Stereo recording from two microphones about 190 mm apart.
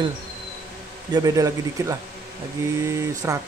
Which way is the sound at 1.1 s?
20° right (ahead or behind).